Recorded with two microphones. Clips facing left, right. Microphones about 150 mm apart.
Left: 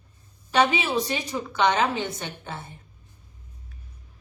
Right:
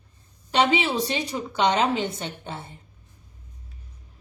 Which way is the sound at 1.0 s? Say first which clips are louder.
Right 1 dB; 25° right (ahead or behind).